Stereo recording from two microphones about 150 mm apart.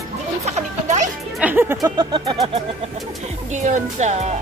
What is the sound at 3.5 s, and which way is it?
Speech, 55° right (ahead or behind).